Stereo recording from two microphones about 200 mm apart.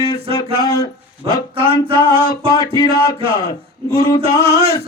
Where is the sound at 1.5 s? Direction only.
25° right (ahead or behind).